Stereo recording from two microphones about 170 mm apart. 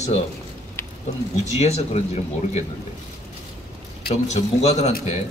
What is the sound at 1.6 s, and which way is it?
Speech, 40° left (ahead or behind).